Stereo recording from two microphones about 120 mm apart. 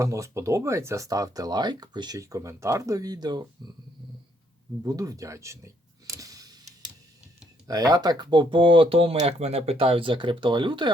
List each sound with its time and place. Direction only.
0.0 s speech: 25° right (ahead or behind)
4.8 s a sound: 30° right (ahead or behind)
7.7 s speech: 30° right (ahead or behind)